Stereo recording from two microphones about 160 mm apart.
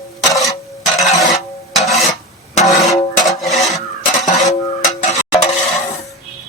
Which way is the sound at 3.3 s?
Centre (ahead or behind).